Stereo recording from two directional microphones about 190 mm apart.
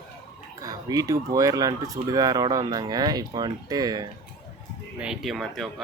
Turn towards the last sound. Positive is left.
turn(degrees=0)  # may be behind; listen again after turning